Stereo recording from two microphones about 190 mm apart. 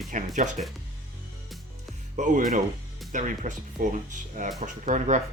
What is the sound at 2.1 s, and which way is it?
Speech, 40° right (ahead or behind).